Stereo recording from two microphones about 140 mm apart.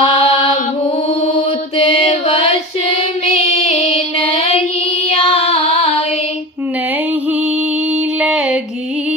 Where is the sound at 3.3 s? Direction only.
50° left (ahead or behind).